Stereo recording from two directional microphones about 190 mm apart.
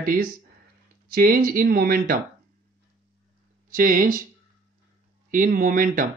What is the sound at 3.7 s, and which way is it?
Speech, 45° right (ahead or behind).